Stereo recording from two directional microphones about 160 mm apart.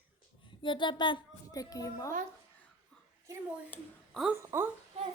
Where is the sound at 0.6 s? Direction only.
30° left (ahead or behind).